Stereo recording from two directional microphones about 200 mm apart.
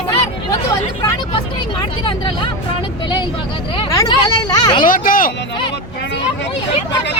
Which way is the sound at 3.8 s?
20° left (ahead or behind).